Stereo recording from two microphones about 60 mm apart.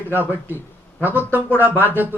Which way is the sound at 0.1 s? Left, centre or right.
Right.